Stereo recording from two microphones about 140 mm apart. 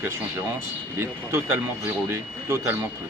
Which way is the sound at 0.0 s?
15° right (ahead or behind).